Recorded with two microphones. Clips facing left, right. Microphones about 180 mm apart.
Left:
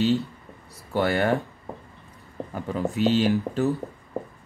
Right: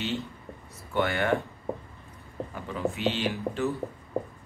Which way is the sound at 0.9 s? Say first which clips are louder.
Left 4 dB; 35° left (ahead or behind).